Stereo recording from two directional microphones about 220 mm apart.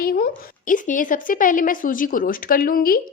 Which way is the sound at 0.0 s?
45° left (ahead or behind).